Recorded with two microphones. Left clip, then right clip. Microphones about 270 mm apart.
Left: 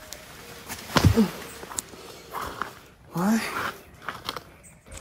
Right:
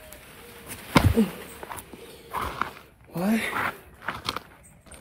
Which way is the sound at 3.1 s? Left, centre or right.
Centre.